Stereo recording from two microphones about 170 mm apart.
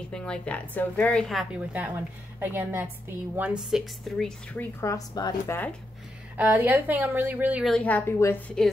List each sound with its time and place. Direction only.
0.1 s a woman's voice: 5° left (ahead or behind)
4.2 s a woman's voice: 10° left (ahead or behind)
6.3 s a woman's voice: 10° right (ahead or behind)
7.7 s a woman's voice: 10° left (ahead or behind)